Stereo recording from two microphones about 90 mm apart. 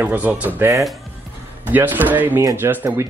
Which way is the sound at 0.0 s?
20° right (ahead or behind).